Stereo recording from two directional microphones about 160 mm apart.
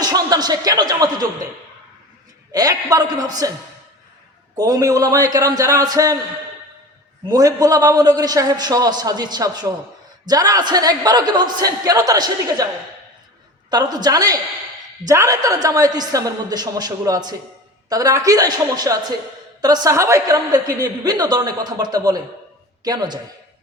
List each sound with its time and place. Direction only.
0.0 s a woman's voice: 25° right (ahead or behind)
2.5 s a woman's voice: 20° right (ahead or behind)
4.5 s a woman's voice: 25° right (ahead or behind)
7.3 s a woman's voice: 20° right (ahead or behind)
13.7 s a woman's voice: 25° right (ahead or behind)